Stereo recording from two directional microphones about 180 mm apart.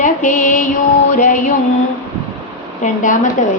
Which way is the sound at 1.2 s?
45° left (ahead or behind).